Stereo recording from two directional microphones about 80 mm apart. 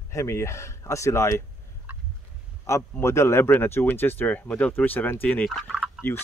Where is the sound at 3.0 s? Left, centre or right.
Left.